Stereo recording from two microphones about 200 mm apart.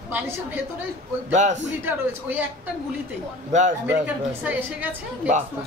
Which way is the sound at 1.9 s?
10° right (ahead or behind).